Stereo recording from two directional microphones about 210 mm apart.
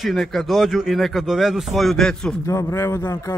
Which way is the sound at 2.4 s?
15° left (ahead or behind).